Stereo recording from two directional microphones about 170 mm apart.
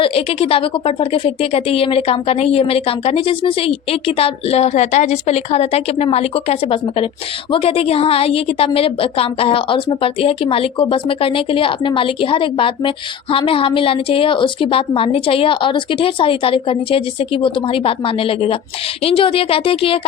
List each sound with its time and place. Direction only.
0.0 s a woman's voice: 35° left (ahead or behind)